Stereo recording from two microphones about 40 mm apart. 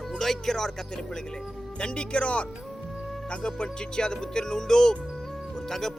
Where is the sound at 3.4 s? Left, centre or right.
Centre.